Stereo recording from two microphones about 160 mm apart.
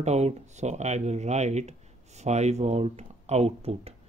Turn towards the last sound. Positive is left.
turn(degrees=-40)  # may be behind; listen again after turning